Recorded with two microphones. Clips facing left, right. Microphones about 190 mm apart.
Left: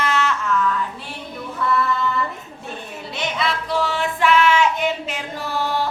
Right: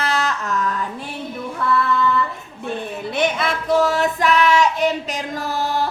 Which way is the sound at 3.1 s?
50° right (ahead or behind).